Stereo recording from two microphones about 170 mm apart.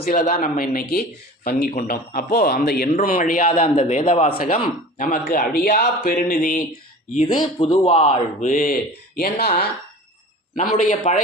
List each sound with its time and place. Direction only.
0.0 s a man's voice: 55° left (ahead or behind); by 4.4 s 35° left (ahead or behind)
4.5 s speech: 55° left (ahead or behind)
7.3 s speech: 25° left (ahead or behind)
8.4 s speech: 50° left (ahead or behind); by 9.6 s 65° left (ahead or behind)
10.5 s a man's voice: 50° left (ahead or behind)